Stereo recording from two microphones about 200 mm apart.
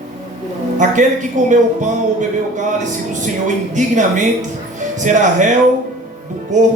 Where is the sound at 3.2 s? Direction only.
40° right (ahead or behind).